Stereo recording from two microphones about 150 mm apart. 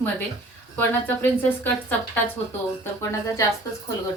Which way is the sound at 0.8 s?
10° left (ahead or behind).